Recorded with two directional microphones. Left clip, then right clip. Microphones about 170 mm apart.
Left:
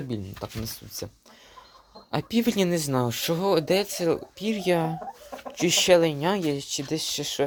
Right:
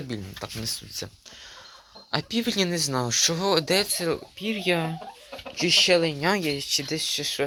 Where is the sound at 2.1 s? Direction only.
15° left (ahead or behind).